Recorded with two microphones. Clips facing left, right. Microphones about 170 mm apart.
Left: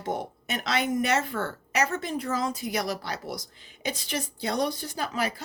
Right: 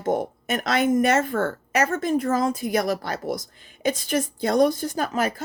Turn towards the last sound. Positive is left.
turn(degrees=-50)  # may be behind; listen again after turning